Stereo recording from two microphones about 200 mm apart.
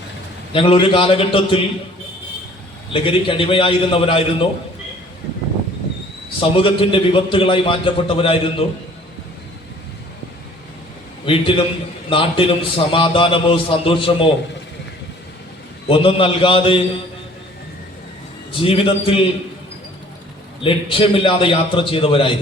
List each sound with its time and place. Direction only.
0.5 s a man's voice: 25° left (ahead or behind)
2.9 s a man's voice: 25° left (ahead or behind)
6.4 s a man's voice: 25° left (ahead or behind)
11.3 s a man's voice: 25° left (ahead or behind)
15.9 s a man's voice: 25° left (ahead or behind)
18.5 s a man's voice: 25° left (ahead or behind)
20.7 s a man's voice: 25° left (ahead or behind)